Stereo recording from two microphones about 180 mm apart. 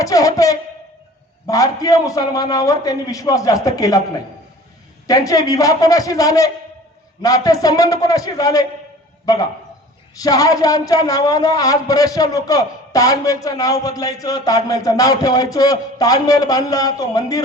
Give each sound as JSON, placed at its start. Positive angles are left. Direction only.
{"t": 0.0, "sound": "speech", "side_deg": 20}
{"t": 5.0, "sound": "a man's voice", "side_deg": 20}